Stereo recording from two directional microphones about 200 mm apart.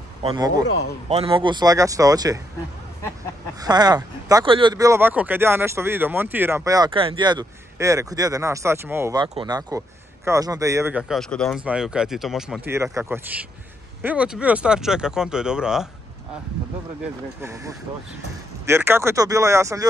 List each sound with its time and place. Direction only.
0.2 s speech: 20° right (ahead or behind)
3.6 s speech: 20° right (ahead or behind); by 15.9 s 5° right (ahead or behind)
17.4 s speech: 15° right (ahead or behind)